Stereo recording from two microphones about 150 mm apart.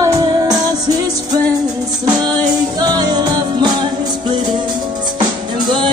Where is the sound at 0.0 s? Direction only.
25° right (ahead or behind).